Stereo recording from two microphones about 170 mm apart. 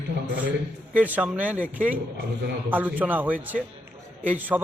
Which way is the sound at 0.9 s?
10° right (ahead or behind).